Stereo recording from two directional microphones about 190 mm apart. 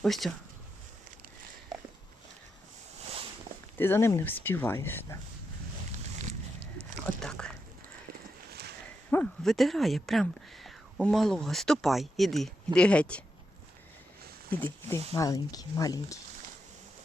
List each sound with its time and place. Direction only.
0.0 s speech: centre (ahead or behind)
3.8 s speech: 10° left (ahead or behind)
6.0 s a sound: 40° right (ahead or behind)
7.2 s a sound: 5° left (ahead or behind)
9.0 s speech: 5° left (ahead or behind)
14.5 s speech: 10° left (ahead or behind)